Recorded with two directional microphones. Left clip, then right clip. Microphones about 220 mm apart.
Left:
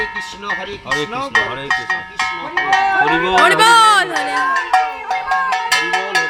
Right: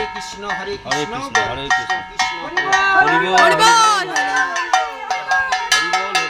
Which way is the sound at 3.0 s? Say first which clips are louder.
Even; 5° right (ahead or behind).